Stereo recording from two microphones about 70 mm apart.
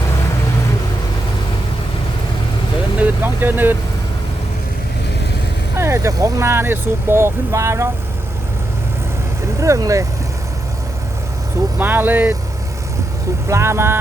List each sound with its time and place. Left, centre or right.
3.0 s speech: right
5.7 s speech: right
6.4 s speech: right
9.6 s speech: right
11.8 s speech: right
13.5 s speech: right